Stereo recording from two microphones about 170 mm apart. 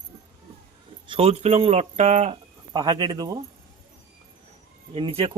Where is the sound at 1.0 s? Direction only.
35° right (ahead or behind).